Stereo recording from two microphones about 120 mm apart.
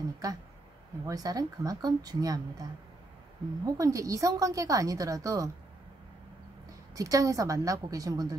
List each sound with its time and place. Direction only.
0.2 s a woman's voice: 30° right (ahead or behind)
3.6 s a woman's voice: 30° right (ahead or behind)
7.0 s a woman's voice: 30° right (ahead or behind)